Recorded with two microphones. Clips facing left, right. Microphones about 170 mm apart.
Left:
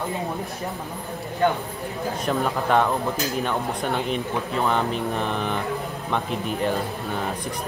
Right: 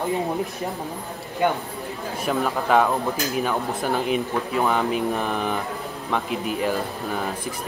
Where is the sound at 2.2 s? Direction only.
5° right (ahead or behind).